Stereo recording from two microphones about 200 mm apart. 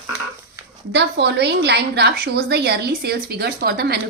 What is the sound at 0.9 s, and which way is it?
A woman's voice, 60° right (ahead or behind).